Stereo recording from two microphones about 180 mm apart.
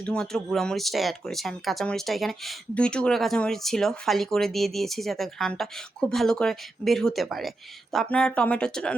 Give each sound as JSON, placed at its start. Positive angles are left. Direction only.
{"t": 0.0, "sound": "speech", "side_deg": 5}